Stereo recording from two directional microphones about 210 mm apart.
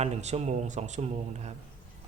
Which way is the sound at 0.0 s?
30° right (ahead or behind).